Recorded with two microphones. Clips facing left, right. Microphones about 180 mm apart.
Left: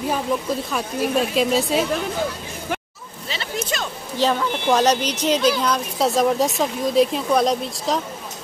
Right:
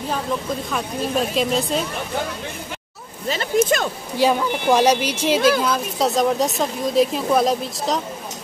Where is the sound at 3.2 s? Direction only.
45° right (ahead or behind).